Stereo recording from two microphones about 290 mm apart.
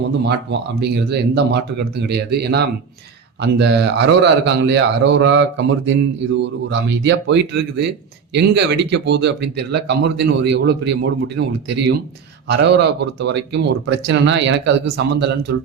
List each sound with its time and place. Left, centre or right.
0.3 s speech: right